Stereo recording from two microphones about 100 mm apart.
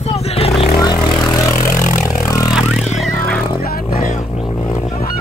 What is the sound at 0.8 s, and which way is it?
Vehicle, 45° left (ahead or behind).